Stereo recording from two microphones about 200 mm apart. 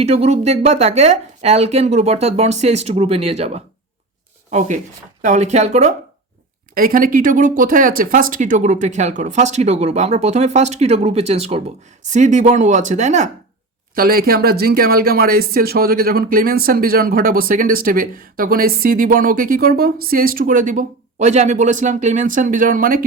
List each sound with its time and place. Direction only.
0.0 s speech: 30° right (ahead or behind)
5.2 s speech: 35° right (ahead or behind)
6.7 s speech: 45° right (ahead or behind)
13.9 s speech: 50° right (ahead or behind)